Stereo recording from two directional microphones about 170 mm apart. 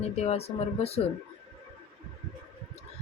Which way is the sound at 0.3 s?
35° left (ahead or behind).